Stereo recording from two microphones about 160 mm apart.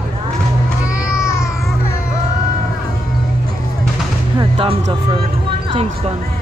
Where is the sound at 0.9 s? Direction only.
5° right (ahead or behind).